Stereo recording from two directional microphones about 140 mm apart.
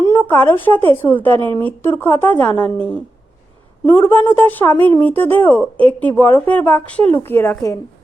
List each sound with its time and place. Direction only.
0.1 s a woman's voice: 15° left (ahead or behind)